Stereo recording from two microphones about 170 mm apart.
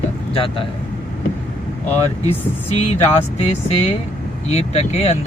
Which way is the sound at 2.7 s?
40° left (ahead or behind).